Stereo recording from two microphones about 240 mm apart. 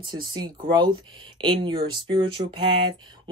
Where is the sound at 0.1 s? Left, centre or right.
Centre.